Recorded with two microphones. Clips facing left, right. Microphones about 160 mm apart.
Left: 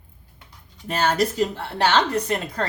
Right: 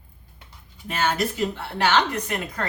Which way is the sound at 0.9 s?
40° left (ahead or behind).